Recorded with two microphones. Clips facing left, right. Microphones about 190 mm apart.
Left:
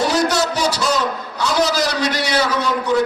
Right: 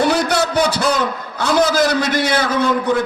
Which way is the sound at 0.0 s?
60° right (ahead or behind).